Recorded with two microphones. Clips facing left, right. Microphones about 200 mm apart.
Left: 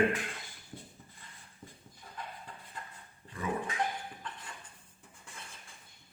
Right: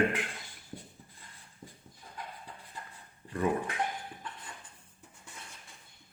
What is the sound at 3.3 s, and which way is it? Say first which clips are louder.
Dog: right 5 dB; 60° right (ahead or behind).